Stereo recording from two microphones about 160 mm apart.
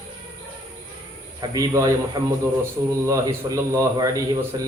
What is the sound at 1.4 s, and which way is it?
A man's voice, 20° right (ahead or behind).